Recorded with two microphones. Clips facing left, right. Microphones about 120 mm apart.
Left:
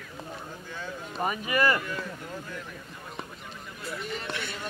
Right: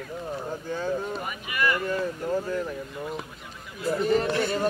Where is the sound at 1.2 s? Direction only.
40° left (ahead or behind).